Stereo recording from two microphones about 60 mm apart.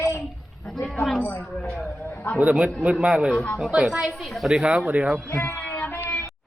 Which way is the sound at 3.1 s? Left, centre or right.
Centre.